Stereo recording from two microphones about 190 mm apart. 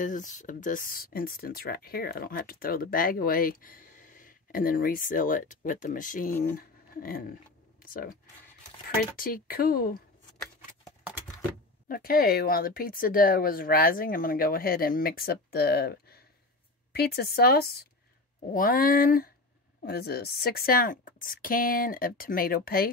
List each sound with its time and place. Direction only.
0.0 s speech: 45° left (ahead or behind)
11.9 s speech: 50° left (ahead or behind)